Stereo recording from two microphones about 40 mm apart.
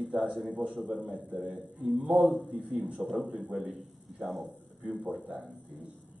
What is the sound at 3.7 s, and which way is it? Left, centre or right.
Speech, centre.